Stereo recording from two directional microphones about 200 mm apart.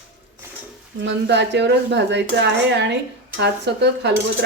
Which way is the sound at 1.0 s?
60° right (ahead or behind).